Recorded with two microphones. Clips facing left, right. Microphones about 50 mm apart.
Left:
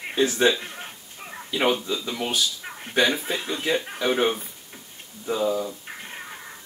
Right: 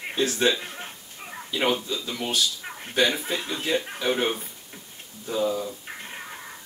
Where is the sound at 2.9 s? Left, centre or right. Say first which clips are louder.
Left 1 dB; centre.